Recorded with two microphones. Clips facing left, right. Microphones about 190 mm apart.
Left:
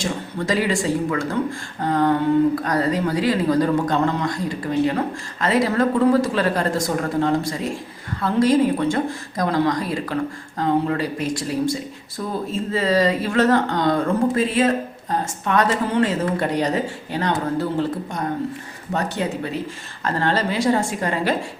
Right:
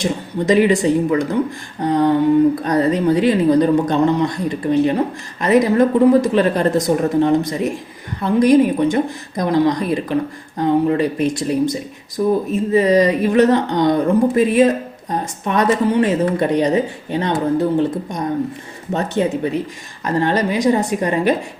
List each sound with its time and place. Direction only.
0.0 s a woman's voice: 20° right (ahead or behind)